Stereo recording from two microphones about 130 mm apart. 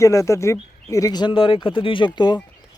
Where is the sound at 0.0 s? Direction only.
25° left (ahead or behind).